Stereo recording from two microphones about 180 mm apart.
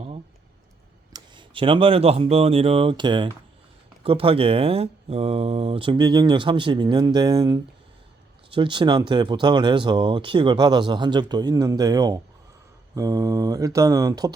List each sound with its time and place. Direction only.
1.1 s speech: 25° right (ahead or behind)